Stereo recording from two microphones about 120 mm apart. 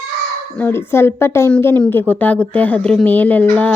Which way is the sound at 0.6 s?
20° left (ahead or behind).